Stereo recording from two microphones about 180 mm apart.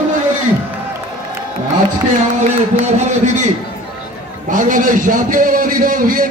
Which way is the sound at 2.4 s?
40° right (ahead or behind).